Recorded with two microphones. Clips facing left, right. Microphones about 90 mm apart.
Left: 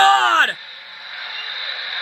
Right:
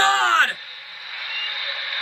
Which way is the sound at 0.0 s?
35° left (ahead or behind).